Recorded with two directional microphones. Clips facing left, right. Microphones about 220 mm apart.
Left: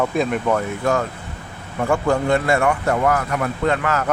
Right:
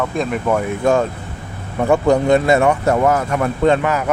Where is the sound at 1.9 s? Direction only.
20° right (ahead or behind).